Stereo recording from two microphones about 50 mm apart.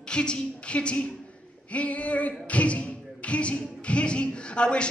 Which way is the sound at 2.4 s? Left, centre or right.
Left.